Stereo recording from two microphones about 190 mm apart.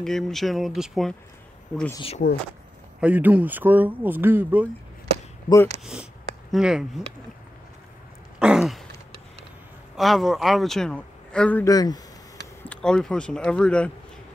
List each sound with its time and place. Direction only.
0.0 s a man's voice: centre (ahead or behind)
2.0 s speech: 30° left (ahead or behind)
3.0 s speech: 10° right (ahead or behind)
6.5 s a man's voice: 5° right (ahead or behind)
8.4 s throat clearing: 5° right (ahead or behind)
9.9 s a man's voice: centre (ahead or behind)
11.7 s speech: 20° left (ahead or behind)
12.6 s a man's voice: 5° left (ahead or behind)